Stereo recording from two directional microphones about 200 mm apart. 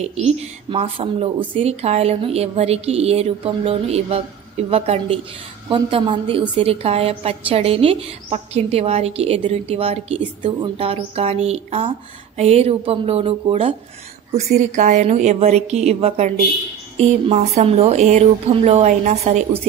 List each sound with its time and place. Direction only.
0.0 s a woman's voice: 30° right (ahead or behind)